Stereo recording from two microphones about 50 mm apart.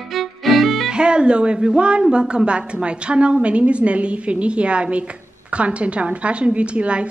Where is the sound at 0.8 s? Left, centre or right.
Centre.